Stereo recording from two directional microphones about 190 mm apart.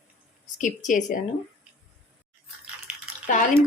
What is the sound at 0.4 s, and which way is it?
Speech, 40° left (ahead or behind).